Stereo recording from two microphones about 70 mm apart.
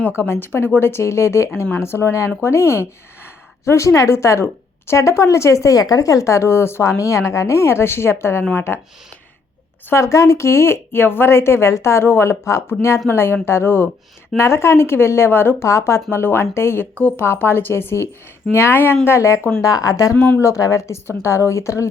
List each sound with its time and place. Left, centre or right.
0.2 s a woman's voice: left
6.9 s speech: left
9.9 s speech: left
15.6 s speech: left
16.0 s speech: left
19.6 s speech: left